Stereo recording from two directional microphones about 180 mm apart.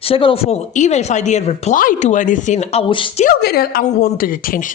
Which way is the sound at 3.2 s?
60° left (ahead or behind).